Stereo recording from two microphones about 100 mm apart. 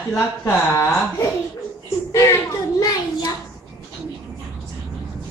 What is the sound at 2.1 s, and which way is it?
Speech, 30° left (ahead or behind).